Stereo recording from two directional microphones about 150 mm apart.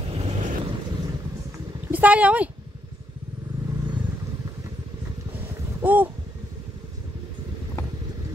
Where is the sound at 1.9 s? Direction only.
10° right (ahead or behind).